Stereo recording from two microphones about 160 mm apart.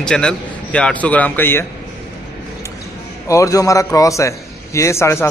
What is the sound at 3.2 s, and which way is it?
A man's voice, 20° left (ahead or behind).